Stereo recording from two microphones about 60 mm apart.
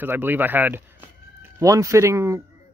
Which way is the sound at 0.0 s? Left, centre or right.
Right.